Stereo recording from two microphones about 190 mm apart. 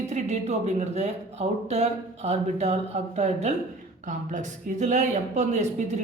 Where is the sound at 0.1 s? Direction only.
35° right (ahead or behind).